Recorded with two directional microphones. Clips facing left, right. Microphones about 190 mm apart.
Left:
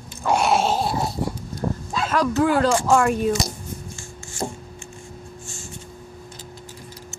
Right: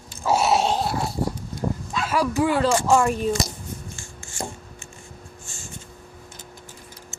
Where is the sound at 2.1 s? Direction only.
10° right (ahead or behind).